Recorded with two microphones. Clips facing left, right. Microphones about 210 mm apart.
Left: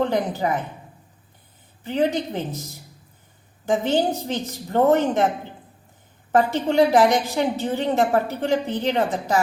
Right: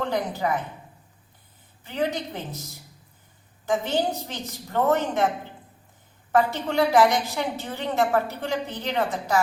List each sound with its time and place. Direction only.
0.0 s a woman's voice: 25° left (ahead or behind)
1.8 s a woman's voice: 25° left (ahead or behind)
3.7 s a woman's voice: 25° left (ahead or behind)
6.3 s a woman's voice: 20° left (ahead or behind)